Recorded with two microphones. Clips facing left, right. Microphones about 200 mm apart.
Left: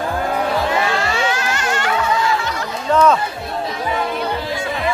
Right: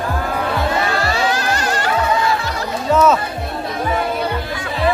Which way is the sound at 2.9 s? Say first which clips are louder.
Even; 5° right (ahead or behind).